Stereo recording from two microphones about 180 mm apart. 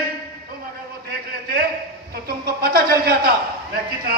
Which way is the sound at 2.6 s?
60° right (ahead or behind).